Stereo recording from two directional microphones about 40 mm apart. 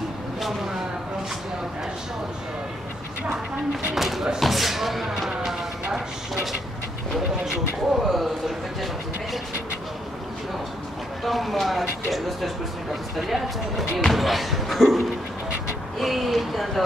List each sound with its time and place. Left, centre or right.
3.9 s speech: centre
7.4 s speech: centre
11.2 s speech: centre